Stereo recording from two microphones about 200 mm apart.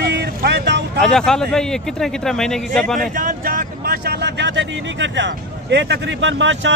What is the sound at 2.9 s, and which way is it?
Speech, 45° right (ahead or behind).